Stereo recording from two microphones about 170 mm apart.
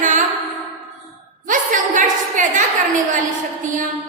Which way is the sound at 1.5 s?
50° right (ahead or behind).